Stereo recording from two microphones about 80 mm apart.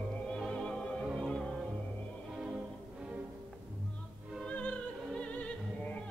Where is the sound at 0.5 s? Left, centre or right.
Centre.